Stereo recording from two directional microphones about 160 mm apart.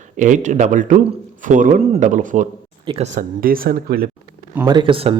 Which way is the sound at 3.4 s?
65° right (ahead or behind).